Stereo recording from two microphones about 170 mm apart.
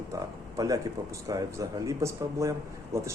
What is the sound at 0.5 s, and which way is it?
A man's voice, 20° right (ahead or behind).